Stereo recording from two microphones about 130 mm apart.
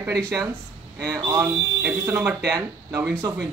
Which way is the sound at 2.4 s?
25° right (ahead or behind).